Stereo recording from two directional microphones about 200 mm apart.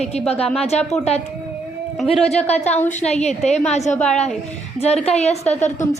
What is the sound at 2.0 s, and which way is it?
A woman's voice, 30° left (ahead or behind).